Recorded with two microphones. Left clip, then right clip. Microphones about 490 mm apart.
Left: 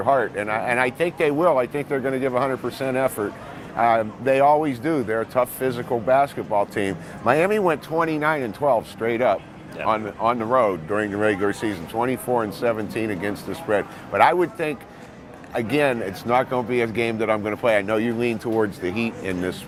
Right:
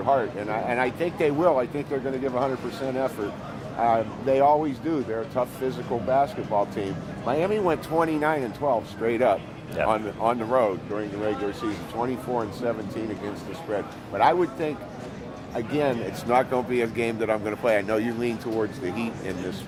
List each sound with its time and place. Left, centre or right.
0.0 s speech: left
3.8 s speech: left
7.9 s speech: left
10.9 s speech: left